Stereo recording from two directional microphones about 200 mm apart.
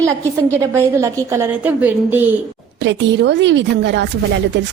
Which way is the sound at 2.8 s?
65° right (ahead or behind).